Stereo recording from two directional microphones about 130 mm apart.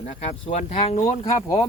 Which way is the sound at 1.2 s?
25° left (ahead or behind).